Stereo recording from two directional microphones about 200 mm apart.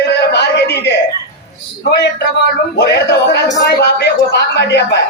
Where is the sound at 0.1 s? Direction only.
55° left (ahead or behind).